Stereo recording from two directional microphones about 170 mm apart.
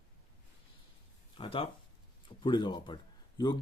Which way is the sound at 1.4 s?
30° left (ahead or behind).